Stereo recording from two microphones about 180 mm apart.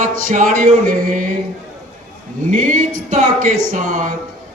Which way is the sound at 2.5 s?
45° right (ahead or behind).